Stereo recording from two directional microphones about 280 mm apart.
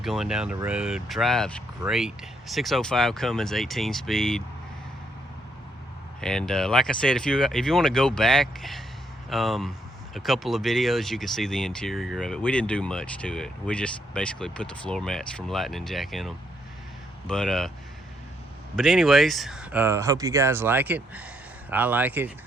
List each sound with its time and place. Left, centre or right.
0.0 s speech: centre
6.2 s speech: centre
18.8 s speech: centre